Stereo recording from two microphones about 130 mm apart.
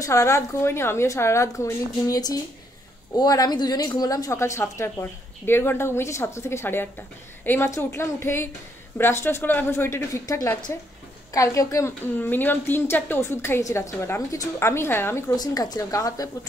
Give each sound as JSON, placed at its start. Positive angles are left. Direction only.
{"t": 0.0, "sound": "a woman's voice", "side_deg": 25}
{"t": 15.3, "sound": "a woman's voice", "side_deg": 30}